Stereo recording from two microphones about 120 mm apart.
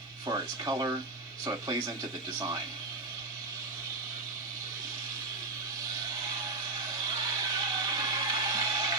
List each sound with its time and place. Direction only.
0.3 s speech: 35° right (ahead or behind)
7.1 s music: 30° right (ahead or behind)